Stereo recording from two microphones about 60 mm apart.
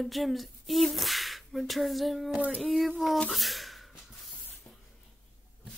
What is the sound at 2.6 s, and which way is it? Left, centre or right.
Speech, centre.